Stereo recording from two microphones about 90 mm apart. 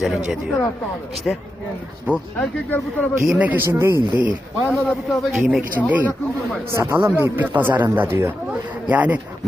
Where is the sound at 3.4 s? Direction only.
20° right (ahead or behind).